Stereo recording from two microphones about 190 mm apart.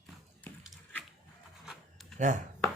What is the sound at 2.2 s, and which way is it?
Speech, 40° right (ahead or behind).